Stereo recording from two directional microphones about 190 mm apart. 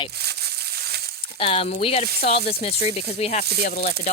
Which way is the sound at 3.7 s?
45° left (ahead or behind).